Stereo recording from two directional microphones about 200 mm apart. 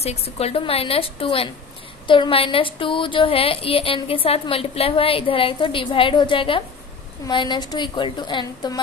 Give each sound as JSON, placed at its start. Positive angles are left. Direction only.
{"t": 0.0, "sound": "speech", "side_deg": 30}